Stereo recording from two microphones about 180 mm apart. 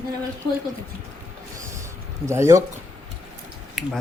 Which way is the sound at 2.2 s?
15° right (ahead or behind).